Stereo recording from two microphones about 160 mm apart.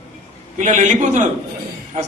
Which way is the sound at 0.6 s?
50° right (ahead or behind).